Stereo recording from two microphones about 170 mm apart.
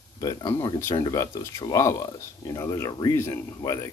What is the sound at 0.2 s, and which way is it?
Speech, 25° left (ahead or behind).